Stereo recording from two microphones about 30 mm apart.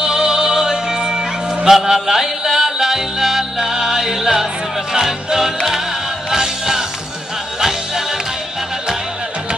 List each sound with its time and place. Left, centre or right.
0.0 s music: right
1.7 s music: centre
6.3 s music: centre